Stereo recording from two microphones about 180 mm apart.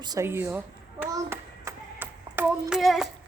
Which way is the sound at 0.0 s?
20° right (ahead or behind).